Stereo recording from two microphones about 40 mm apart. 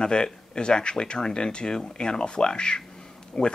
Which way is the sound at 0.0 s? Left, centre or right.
Left.